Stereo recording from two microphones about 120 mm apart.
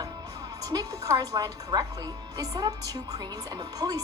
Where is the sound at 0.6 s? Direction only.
30° right (ahead or behind).